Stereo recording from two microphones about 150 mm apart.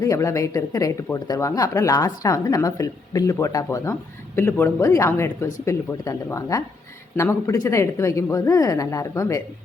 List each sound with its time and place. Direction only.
0.0 s speech: 20° left (ahead or behind)